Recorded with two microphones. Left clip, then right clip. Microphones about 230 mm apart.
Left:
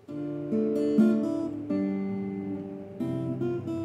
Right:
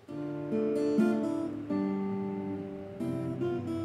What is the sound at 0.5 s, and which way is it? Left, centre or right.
Guitar, centre.